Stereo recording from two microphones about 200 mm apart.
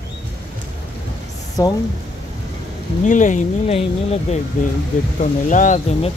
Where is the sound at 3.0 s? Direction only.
40° left (ahead or behind).